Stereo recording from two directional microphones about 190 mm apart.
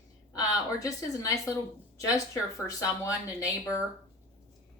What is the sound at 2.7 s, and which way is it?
A woman's voice, 15° left (ahead or behind).